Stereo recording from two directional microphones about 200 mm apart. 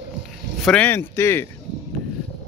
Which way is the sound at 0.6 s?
5° left (ahead or behind).